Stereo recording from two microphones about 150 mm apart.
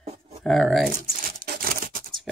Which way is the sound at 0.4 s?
5° left (ahead or behind).